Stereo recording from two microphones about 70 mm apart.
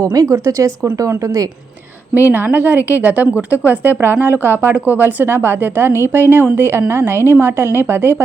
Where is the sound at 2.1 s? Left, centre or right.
Right.